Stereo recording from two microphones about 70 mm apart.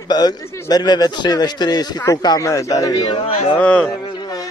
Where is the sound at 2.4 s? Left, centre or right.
Left.